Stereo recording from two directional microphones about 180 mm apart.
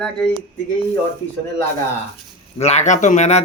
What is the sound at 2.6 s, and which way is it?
Speech, 40° left (ahead or behind).